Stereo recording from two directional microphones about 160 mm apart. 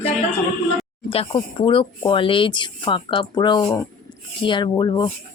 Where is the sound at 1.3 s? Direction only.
35° left (ahead or behind).